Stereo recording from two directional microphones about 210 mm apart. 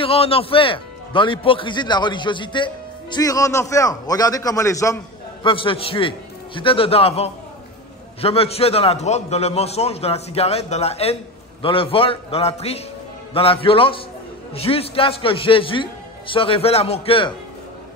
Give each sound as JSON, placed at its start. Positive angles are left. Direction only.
{"t": 0.0, "sound": "a man's voice", "side_deg": 25}